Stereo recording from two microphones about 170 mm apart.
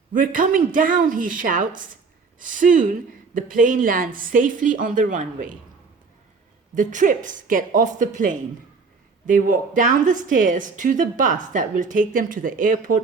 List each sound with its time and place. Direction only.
0.1 s a woman's voice: 50° right (ahead or behind)
6.7 s a woman's voice: 50° right (ahead or behind)